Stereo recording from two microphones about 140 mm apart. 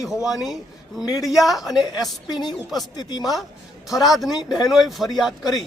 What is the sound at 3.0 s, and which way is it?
Speech, 30° left (ahead or behind).